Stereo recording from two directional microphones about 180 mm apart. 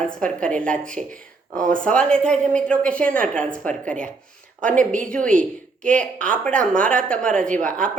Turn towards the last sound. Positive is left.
turn(degrees=5)  # may be behind; listen again after turning